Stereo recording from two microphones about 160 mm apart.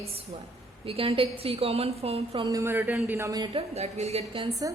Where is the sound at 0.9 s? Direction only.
35° right (ahead or behind).